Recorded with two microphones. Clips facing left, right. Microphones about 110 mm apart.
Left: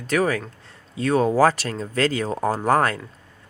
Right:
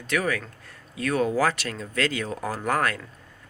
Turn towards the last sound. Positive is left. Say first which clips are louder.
# left 6 dB
turn(degrees=30)  # may be behind; listen again after turning